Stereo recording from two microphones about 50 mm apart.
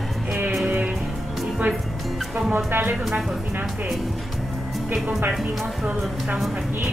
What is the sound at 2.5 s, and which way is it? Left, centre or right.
Speech, right.